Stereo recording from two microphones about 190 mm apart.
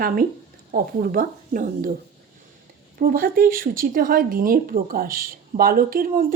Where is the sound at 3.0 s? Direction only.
50° right (ahead or behind).